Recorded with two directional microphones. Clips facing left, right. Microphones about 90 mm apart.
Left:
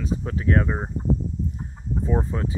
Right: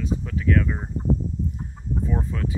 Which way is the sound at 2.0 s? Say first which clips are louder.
Left 4 dB; 30° left (ahead or behind).